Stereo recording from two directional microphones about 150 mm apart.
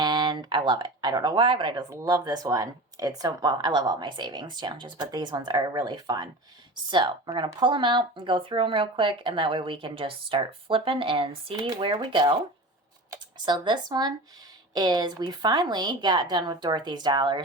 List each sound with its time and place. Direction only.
0.0 s speech: 30° right (ahead or behind)
13.4 s speech: 30° right (ahead or behind)